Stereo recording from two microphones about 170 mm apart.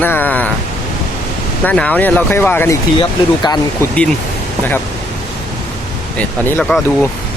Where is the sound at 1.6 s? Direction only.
10° left (ahead or behind).